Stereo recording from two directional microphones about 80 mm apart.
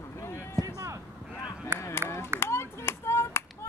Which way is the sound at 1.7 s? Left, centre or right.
Right.